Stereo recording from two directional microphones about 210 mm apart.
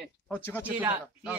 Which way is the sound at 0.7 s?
5° right (ahead or behind).